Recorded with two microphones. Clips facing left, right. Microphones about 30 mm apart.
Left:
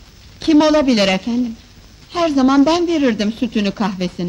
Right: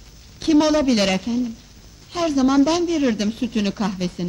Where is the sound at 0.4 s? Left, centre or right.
Centre.